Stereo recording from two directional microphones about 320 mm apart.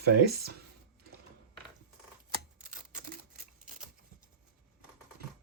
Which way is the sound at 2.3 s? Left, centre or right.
Right.